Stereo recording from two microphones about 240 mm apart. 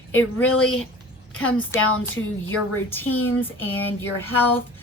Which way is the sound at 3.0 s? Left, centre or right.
Left.